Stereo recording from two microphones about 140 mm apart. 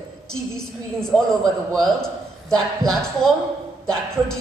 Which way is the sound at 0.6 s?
5° left (ahead or behind).